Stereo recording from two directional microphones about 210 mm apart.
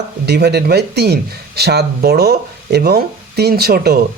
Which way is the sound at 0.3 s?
50° right (ahead or behind).